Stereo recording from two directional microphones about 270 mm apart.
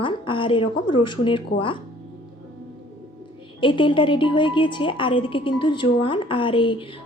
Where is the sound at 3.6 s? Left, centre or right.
Centre.